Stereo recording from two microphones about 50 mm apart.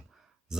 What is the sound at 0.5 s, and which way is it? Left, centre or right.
Speech, centre.